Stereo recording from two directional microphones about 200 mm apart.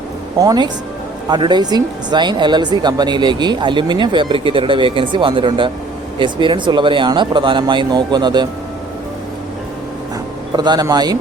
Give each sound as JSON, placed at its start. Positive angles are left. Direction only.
{"t": 0.3, "sound": "speech", "side_deg": -20}
{"t": 10.6, "sound": "speech", "side_deg": -20}